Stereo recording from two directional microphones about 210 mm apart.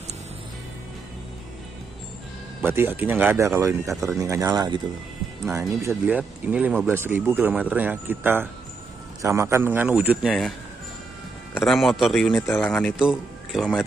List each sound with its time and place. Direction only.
2.6 s speech: 10° right (ahead or behind)
11.5 s speech: centre (ahead or behind)